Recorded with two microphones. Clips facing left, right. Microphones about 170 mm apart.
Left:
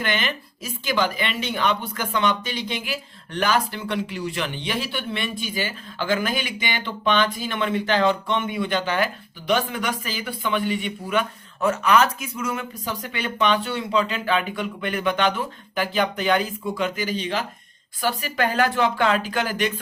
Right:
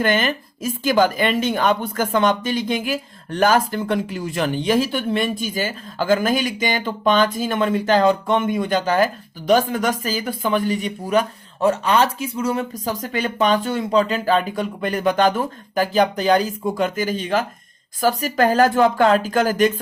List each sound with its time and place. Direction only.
0.0 s a woman's voice: 45° right (ahead or behind)